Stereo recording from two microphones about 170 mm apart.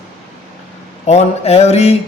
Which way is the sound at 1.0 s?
40° left (ahead or behind).